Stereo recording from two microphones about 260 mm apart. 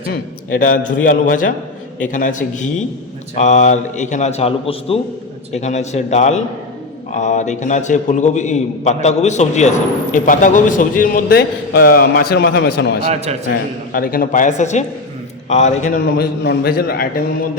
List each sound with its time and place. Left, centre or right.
0.1 s a man's voice: left
13.1 s a man's voice: right
13.5 s a man's voice: left